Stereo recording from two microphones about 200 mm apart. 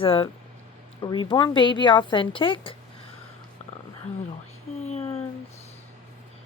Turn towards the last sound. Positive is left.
turn(degrees=30)  # may be behind; listen again after turning